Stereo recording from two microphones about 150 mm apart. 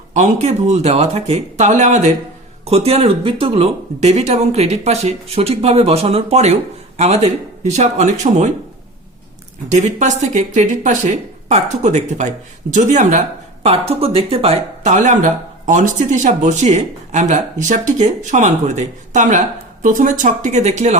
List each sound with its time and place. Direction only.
0.1 s speech: 50° right (ahead or behind)
9.6 s speech: 50° right (ahead or behind)